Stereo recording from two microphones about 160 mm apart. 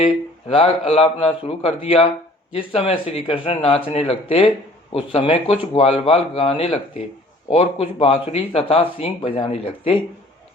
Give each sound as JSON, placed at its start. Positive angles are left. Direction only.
{"t": 0.0, "sound": "speech", "side_deg": 35}